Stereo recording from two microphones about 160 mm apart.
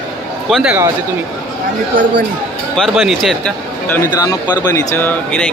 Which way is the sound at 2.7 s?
Centre (ahead or behind).